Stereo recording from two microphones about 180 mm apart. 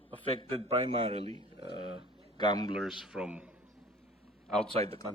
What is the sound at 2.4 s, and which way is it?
Speech, 25° left (ahead or behind).